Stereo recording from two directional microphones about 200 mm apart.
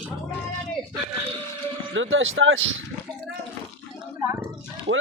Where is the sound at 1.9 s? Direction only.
75° right (ahead or behind).